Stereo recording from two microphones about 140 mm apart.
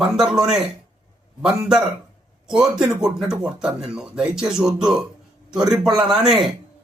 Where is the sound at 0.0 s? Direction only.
5° right (ahead or behind).